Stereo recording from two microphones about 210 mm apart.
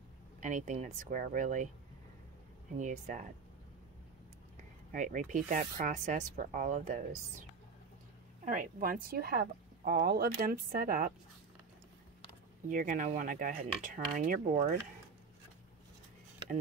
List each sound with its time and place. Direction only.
0.4 s speech: 35° right (ahead or behind)
2.8 s speech: 35° right (ahead or behind)
4.9 s speech: 35° right (ahead or behind)
8.5 s speech: 40° right (ahead or behind)
12.6 s speech: 40° right (ahead or behind)
16.4 s mechanisms: 25° right (ahead or behind)